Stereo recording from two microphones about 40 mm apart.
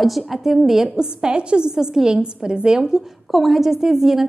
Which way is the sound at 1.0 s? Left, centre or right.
Right.